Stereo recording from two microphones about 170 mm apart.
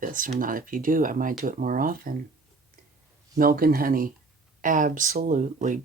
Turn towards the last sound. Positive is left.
turn(degrees=-50)  # may be behind; listen again after turning